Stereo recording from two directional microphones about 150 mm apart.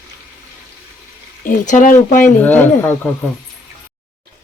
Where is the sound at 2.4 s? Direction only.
10° left (ahead or behind).